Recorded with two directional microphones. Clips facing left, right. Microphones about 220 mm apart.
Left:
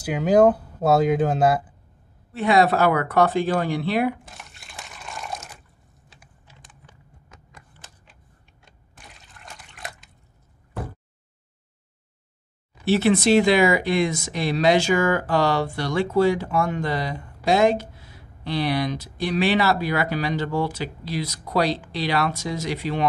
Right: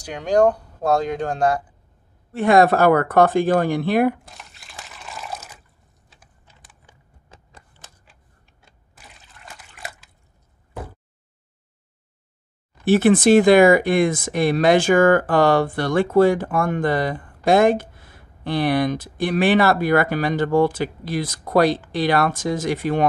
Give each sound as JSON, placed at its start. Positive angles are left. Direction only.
{"t": 0.0, "sound": "speech", "side_deg": 5}
{"t": 2.3, "sound": "speech", "side_deg": -50}
{"t": 4.3, "sound": "water", "side_deg": 0}
{"t": 7.3, "sound": "a sound", "side_deg": -30}
{"t": 8.6, "sound": "liquid", "side_deg": 0}
{"t": 12.8, "sound": "speech", "side_deg": -50}